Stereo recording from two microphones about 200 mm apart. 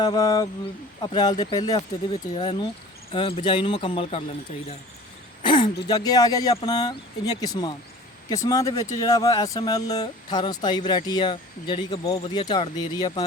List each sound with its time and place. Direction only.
0.0 s speech: 20° left (ahead or behind)
5.4 s speech: 25° left (ahead or behind)